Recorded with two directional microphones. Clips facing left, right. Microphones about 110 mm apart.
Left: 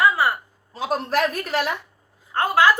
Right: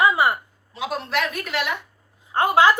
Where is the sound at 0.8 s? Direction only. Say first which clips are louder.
Left 3 dB; 40° left (ahead or behind).